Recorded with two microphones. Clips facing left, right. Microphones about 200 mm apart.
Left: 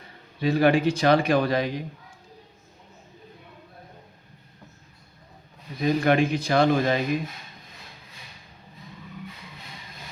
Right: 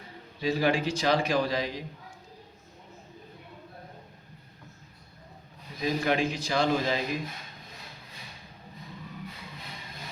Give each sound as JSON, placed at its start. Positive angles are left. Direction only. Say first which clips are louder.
{"t": 0.3, "sound": "a man's voice", "louder": "left 6 dB", "side_deg": 60}
{"t": 5.8, "sound": "a man's voice", "louder": "left 6 dB", "side_deg": 60}